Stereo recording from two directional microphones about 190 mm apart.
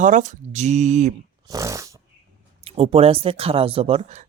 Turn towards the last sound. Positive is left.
turn(degrees=-35)  # may be behind; listen again after turning